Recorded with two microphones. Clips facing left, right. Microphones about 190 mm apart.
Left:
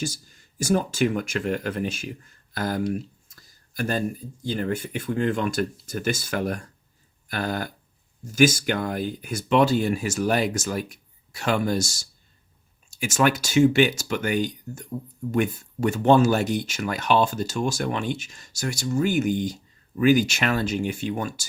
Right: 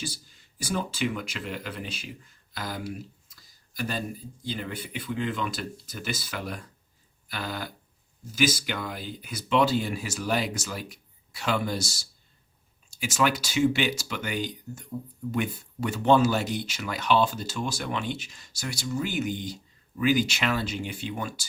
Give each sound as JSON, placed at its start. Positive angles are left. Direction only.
{"t": 0.0, "sound": "speech", "side_deg": 45}
{"t": 7.3, "sound": "a sound", "side_deg": 50}
{"t": 8.2, "sound": "speech", "side_deg": 50}